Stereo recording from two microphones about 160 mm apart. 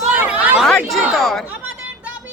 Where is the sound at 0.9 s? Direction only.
Centre (ahead or behind).